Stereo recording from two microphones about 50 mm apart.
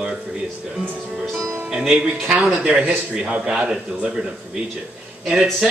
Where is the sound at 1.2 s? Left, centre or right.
Centre.